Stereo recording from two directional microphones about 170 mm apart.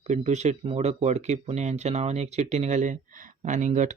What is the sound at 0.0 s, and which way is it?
Speech, 40° right (ahead or behind).